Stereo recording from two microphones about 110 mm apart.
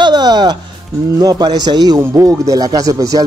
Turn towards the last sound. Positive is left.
turn(degrees=-35)  # may be behind; listen again after turning